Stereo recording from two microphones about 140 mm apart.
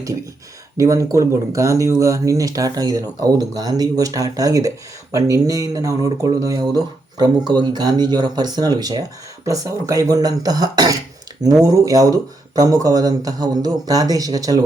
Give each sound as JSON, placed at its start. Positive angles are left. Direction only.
{"t": 0.8, "sound": "speech", "side_deg": -20}